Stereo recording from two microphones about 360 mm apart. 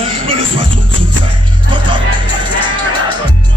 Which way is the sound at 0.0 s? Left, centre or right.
Centre.